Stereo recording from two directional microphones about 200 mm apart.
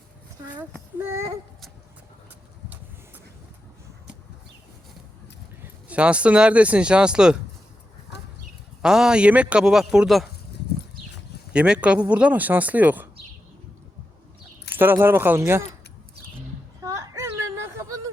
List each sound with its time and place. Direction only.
0.9 s speech: 10° right (ahead or behind)
5.6 s speech: 5° right (ahead or behind)
8.8 s speech: 5° right (ahead or behind)
11.5 s speech: 5° right (ahead or behind)
14.8 s speech: 10° right (ahead or behind)
16.8 s a sound: 15° right (ahead or behind)